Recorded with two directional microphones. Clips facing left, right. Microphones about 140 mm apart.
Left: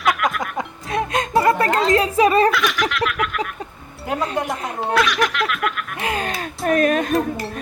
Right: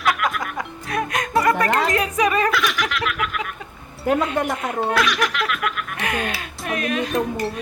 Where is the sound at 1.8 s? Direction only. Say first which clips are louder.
Left 4 dB; 25° left (ahead or behind).